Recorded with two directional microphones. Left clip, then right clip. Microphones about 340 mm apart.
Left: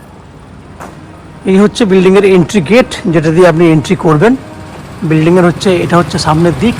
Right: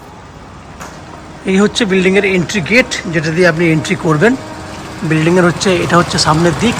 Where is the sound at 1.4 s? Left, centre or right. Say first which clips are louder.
Left 4 dB; centre.